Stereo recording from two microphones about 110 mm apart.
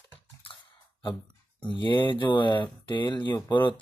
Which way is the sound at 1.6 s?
45° left (ahead or behind).